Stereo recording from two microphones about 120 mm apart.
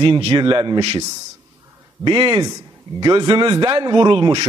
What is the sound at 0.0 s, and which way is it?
Speech, 50° right (ahead or behind).